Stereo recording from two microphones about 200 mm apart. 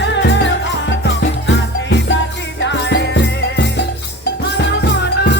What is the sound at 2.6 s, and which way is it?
Music, 60° left (ahead or behind).